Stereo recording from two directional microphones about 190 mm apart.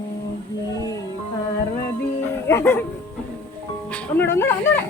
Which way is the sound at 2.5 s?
10° left (ahead or behind).